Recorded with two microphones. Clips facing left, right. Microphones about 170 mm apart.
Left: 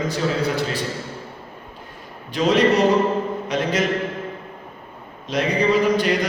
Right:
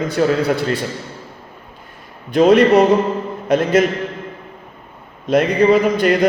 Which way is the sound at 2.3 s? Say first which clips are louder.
Right 7 dB; 55° right (ahead or behind).